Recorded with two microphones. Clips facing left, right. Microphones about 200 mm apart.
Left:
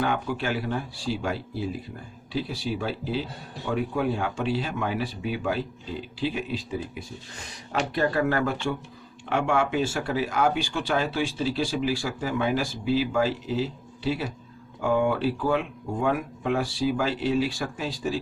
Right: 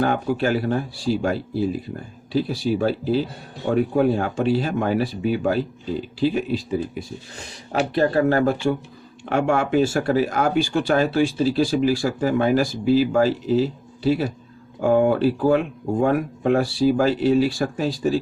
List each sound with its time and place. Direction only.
0.0 s speech: 40° right (ahead or behind)